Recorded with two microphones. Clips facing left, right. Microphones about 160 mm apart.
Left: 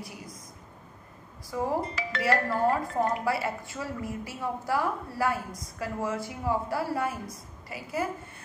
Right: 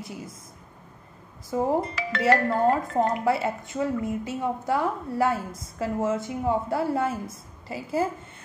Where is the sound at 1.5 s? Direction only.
25° right (ahead or behind).